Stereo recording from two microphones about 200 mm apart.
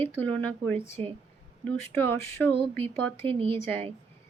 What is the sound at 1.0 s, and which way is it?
Speech, 30° right (ahead or behind).